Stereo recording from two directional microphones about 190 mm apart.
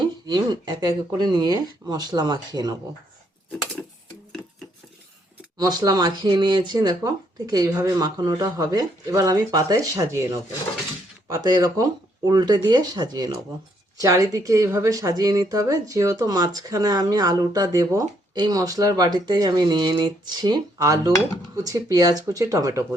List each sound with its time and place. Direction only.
0.3 s a woman's voice: 20° right (ahead or behind)
5.5 s a woman's voice: 20° right (ahead or behind)